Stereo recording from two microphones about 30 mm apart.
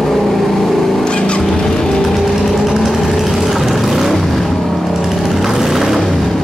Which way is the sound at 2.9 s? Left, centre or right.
Centre.